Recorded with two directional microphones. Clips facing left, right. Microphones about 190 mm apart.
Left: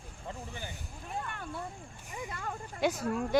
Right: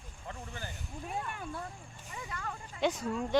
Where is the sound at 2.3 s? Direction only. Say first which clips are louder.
Even; 35° left (ahead or behind).